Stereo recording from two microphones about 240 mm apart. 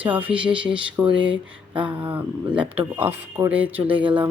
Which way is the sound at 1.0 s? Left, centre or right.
Centre.